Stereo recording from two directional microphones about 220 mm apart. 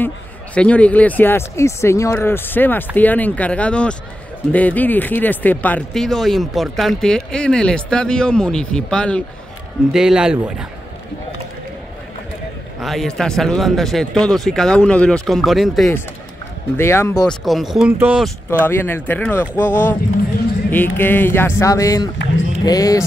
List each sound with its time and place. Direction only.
0.6 s speech: 5° left (ahead or behind)
12.8 s speech: centre (ahead or behind)
16.7 s speech: 10° left (ahead or behind); by 18.3 s 5° right (ahead or behind)
18.7 s speech: 10° left (ahead or behind)